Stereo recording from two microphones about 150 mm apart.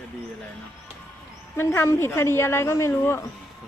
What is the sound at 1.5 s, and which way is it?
A woman's voice, 15° left (ahead or behind).